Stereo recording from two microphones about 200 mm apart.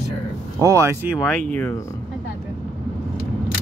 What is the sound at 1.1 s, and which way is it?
Speech, centre (ahead or behind).